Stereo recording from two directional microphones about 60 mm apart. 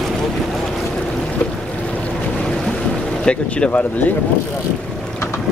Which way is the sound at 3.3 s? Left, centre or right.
Centre.